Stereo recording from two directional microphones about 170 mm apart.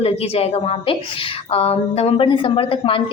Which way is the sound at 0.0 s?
35° left (ahead or behind).